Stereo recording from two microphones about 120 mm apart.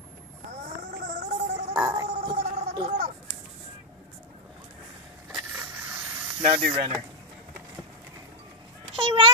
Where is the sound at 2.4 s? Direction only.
80° right.